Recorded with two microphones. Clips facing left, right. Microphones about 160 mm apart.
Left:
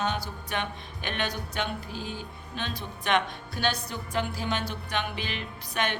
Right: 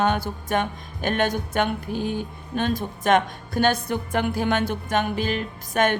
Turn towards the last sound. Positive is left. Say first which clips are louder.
# right 9 dB
turn(degrees=-45)  # may be behind; listen again after turning